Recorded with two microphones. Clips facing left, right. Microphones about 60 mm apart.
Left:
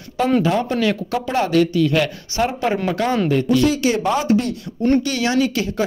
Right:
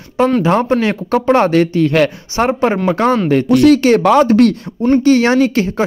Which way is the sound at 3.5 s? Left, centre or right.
Right.